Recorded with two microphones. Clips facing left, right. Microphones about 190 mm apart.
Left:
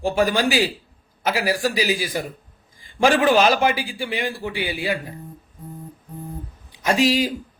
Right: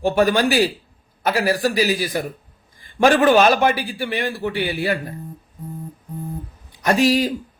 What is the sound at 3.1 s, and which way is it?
Speech, 5° left (ahead or behind).